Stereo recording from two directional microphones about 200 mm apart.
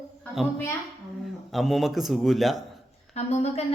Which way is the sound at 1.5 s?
Centre (ahead or behind).